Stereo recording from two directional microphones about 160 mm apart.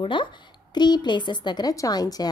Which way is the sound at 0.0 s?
30° left (ahead or behind).